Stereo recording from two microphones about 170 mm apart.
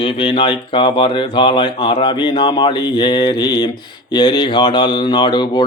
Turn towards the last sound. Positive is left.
turn(degrees=25)  # may be behind; listen again after turning